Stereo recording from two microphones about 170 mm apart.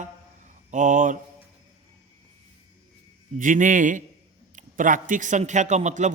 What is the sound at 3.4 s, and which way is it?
A man's voice, 50° right (ahead or behind).